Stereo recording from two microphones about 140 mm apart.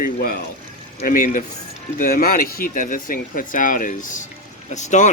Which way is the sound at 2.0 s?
90° left.